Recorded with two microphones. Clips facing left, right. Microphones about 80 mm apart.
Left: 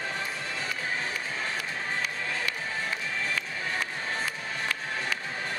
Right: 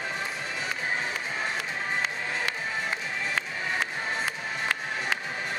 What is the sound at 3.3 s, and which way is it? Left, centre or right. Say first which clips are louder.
Music: right 2 dB; right.